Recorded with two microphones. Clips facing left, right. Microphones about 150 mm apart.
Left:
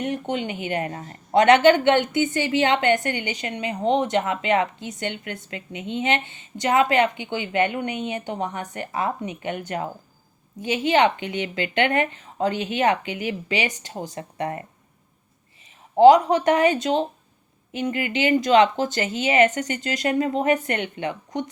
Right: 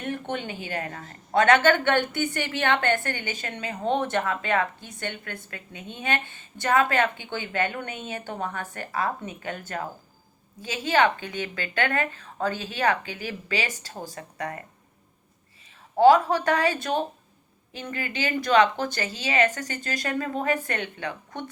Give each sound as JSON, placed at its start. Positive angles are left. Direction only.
{"t": 0.0, "sound": "a woman's voice", "side_deg": 15}
{"t": 16.0, "sound": "a woman's voice", "side_deg": 20}